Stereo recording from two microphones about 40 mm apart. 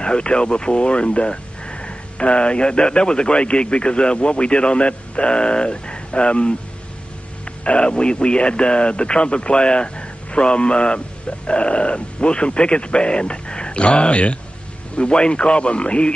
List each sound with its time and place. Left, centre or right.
0.0 s speech: left